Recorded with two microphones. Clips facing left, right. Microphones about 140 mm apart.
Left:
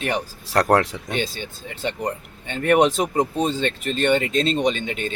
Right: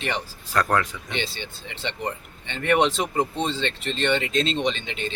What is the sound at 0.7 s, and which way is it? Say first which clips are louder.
Speech: left 6 dB; 80° left.